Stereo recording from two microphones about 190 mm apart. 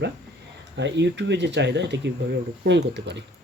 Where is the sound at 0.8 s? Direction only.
65° right (ahead or behind).